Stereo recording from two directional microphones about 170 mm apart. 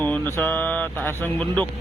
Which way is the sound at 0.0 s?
10° left (ahead or behind).